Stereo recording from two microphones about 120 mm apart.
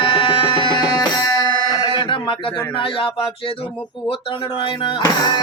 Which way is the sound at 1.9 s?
45° left (ahead or behind).